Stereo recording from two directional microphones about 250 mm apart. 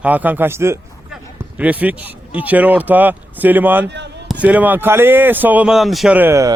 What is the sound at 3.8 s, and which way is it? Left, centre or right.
Speech, right.